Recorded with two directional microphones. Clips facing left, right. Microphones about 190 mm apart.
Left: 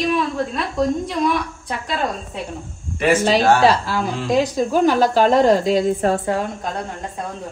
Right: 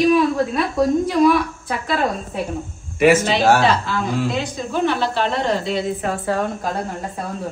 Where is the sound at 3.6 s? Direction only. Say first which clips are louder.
Left 2 dB; 35° left (ahead or behind).